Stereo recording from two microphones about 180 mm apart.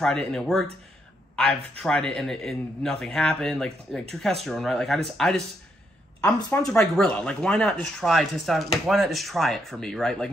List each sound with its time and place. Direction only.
0.0 s speech: 5° left (ahead or behind)
6.2 s speech: 15° left (ahead or behind)
6.8 s speech: 5° left (ahead or behind)